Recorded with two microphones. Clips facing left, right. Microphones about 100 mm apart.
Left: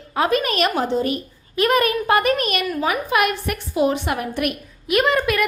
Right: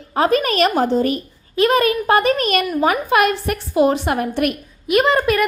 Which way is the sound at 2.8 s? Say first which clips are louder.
Right 4 dB; 45° right (ahead or behind).